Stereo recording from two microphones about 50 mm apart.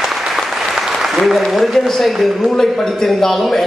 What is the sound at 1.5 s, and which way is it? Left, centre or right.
A man's voice, centre.